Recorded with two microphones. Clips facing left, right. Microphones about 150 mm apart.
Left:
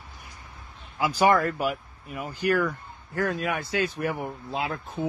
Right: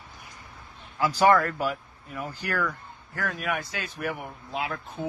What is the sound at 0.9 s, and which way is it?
Speech, 15° left (ahead or behind).